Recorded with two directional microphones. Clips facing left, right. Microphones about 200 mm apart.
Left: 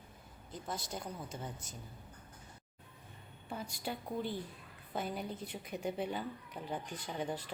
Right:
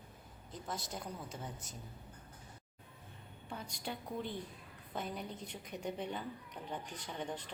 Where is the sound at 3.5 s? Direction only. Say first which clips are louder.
Left 3 dB; 5° left (ahead or behind).